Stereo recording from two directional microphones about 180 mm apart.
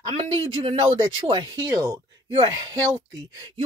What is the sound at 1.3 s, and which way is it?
Speech, 25° right (ahead or behind).